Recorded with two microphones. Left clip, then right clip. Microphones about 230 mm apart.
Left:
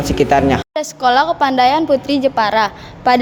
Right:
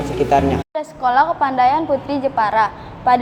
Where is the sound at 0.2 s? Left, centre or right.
Left.